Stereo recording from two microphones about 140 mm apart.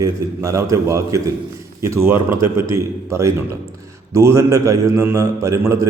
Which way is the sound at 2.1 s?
35° left (ahead or behind).